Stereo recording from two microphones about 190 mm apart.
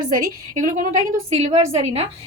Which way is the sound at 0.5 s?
40° right (ahead or behind).